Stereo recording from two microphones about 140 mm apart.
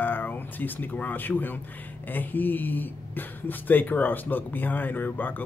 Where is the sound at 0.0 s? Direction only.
15° left (ahead or behind).